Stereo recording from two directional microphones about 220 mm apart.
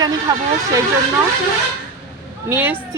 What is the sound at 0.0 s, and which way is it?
Speech, 15° right (ahead or behind).